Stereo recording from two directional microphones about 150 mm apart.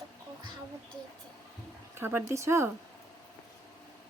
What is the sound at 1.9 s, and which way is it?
Speech, 15° right (ahead or behind).